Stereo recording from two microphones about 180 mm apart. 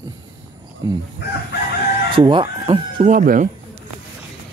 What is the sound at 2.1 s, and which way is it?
Speech, 25° right (ahead or behind).